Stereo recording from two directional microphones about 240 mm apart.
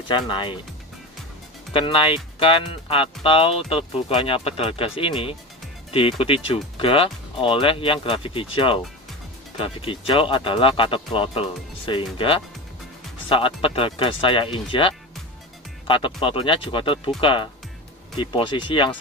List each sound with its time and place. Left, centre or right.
0.1 s speech: left
1.7 s speech: left